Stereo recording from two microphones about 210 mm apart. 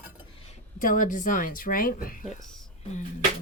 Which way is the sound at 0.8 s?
40° left (ahead or behind).